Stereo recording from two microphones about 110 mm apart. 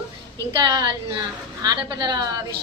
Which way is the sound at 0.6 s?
40° right (ahead or behind).